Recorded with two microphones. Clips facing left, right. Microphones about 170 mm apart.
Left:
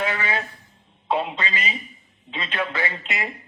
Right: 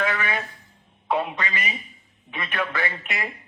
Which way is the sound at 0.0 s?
20° left (ahead or behind).